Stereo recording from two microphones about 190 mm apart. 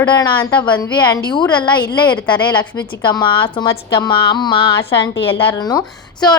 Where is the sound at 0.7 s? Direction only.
20° left (ahead or behind).